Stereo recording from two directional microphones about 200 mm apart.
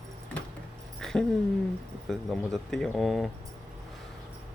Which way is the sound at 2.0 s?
Centre (ahead or behind).